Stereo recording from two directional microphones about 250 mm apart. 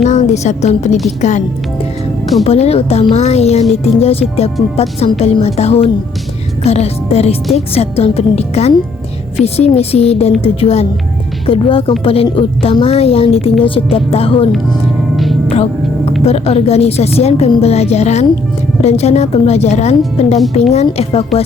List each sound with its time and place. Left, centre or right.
0.0 s a woman's voice: left
2.4 s a woman's voice: left
15.1 s music: centre
15.4 s music: left
16.2 s a woman's voice: left